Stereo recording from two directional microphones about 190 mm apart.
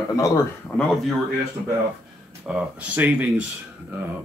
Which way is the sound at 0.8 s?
Centre (ahead or behind).